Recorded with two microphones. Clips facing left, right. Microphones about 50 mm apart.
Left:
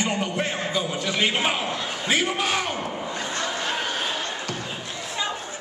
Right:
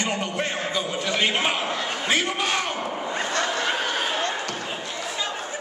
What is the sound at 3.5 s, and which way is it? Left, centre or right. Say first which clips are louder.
Snicker: right 2 dB; right.